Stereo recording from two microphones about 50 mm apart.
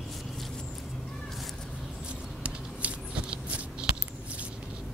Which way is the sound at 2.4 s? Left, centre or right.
Right.